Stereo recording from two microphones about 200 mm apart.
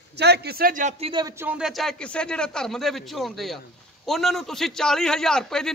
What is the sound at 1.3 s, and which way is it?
A man's voice, 5° right (ahead or behind).